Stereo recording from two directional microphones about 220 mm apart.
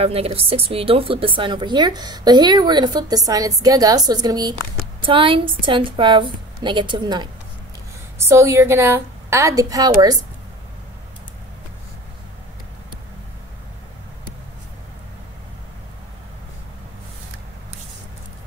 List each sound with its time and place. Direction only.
0.0 s a woman's voice: 25° right (ahead or behind)